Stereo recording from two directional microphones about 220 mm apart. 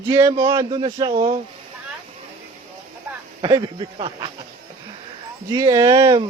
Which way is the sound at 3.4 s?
25° right (ahead or behind).